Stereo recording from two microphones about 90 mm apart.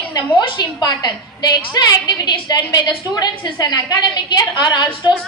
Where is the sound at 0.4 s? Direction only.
55° left (ahead or behind).